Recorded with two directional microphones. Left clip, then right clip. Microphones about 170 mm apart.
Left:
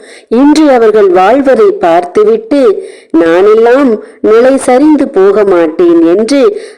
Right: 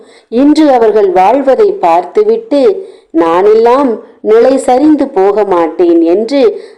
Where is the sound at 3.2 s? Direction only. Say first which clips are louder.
Left 1 dB; 45° left (ahead or behind).